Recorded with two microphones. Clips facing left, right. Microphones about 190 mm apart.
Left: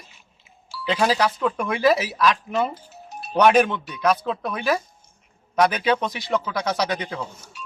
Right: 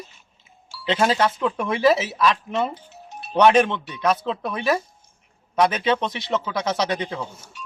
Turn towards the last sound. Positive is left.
turn(degrees=0)  # may be behind; listen again after turning